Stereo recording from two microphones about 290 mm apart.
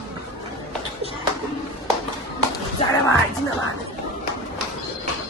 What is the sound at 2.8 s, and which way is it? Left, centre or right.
Speech, centre.